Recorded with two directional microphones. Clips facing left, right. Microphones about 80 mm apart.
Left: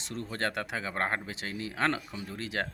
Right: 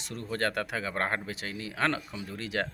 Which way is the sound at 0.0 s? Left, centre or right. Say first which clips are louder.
Right 2 dB; left.